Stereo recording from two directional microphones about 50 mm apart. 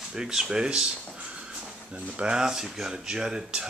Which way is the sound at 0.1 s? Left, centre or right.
Centre.